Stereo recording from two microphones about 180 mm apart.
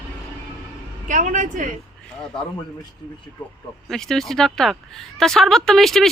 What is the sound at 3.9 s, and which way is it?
Speech, centre (ahead or behind).